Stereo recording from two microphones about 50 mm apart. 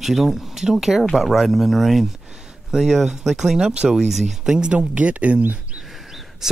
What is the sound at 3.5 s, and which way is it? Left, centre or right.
Speech, centre.